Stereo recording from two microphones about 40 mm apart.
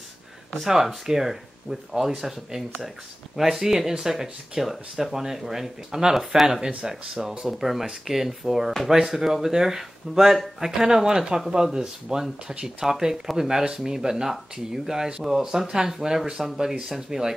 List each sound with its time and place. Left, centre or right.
0.6 s speech: centre; by 7.2 s right
7.4 s speech: centre